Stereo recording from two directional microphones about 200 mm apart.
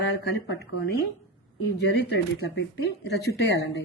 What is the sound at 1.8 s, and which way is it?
Speech, 60° left (ahead or behind).